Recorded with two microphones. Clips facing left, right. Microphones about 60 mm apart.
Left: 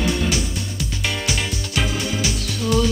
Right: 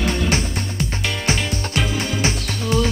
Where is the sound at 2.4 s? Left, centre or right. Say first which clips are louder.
Left 1 dB; centre.